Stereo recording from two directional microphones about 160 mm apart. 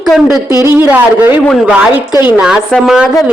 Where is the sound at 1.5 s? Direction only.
Centre (ahead or behind).